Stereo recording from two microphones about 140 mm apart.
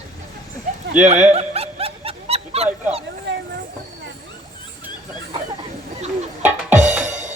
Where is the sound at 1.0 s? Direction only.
55° right (ahead or behind).